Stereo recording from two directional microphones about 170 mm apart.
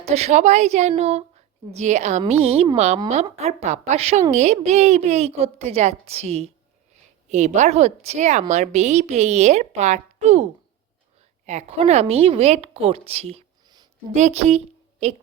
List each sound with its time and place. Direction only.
0.0 s a woman's voice: 40° right (ahead or behind)